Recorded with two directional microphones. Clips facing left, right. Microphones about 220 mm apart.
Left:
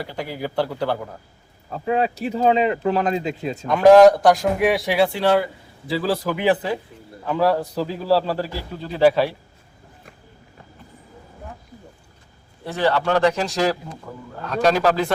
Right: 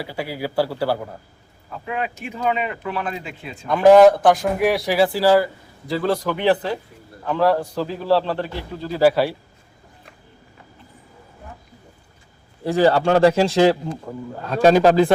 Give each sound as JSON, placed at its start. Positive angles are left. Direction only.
{"t": 0.0, "sound": "a man's voice", "side_deg": -5}
{"t": 1.7, "sound": "speech", "side_deg": 30}
{"t": 3.7, "sound": "speech", "side_deg": 0}
{"t": 12.6, "sound": "a man's voice", "side_deg": -30}